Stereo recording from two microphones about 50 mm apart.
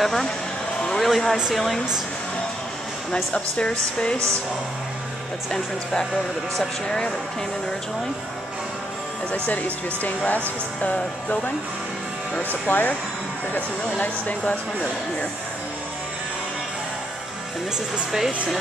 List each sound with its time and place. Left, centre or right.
0.0 s speech: centre
3.3 s speech: left
6.5 s speech: centre
9.3 s speech: left
12.6 s speech: left
14.4 s speech: left